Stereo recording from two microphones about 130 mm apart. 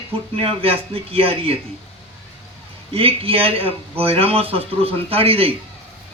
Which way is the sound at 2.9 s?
50° right (ahead or behind).